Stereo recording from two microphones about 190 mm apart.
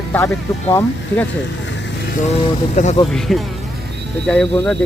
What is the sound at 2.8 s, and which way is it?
Speech, 35° left (ahead or behind).